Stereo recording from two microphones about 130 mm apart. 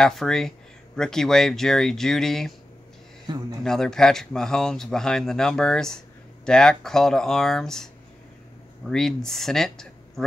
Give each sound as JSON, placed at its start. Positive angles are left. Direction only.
{"t": 0.0, "sound": "speech", "side_deg": 5}
{"t": 3.3, "sound": "speech", "side_deg": -35}
{"t": 3.6, "sound": "speech", "side_deg": 5}